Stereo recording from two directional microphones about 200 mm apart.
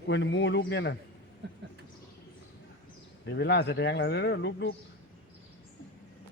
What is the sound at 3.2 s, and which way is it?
A man's voice, 55° left (ahead or behind).